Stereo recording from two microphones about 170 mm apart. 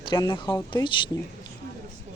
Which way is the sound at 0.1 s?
30° left (ahead or behind).